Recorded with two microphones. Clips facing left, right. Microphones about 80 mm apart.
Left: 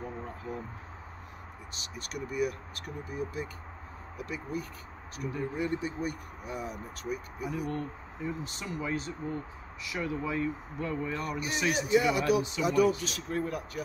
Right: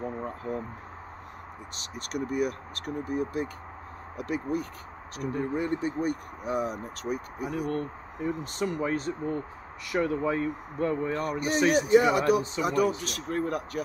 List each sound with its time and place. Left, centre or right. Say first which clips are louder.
0.5 s speech: right 6 dB; right
2.0 s speech: right 4 dB; right
5.3 s speech: right 4 dB; right
6.4 s speech: right 8 dB; right
13.0 s speech: right 3 dB; right